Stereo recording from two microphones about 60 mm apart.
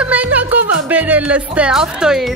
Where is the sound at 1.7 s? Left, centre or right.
Centre.